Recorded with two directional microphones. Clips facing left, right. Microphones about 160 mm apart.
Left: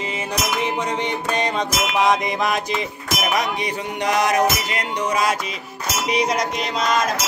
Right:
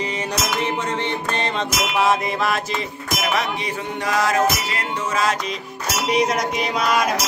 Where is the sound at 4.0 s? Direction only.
20° left (ahead or behind).